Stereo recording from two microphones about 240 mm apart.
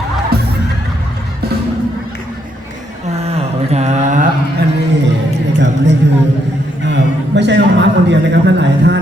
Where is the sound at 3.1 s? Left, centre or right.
Right.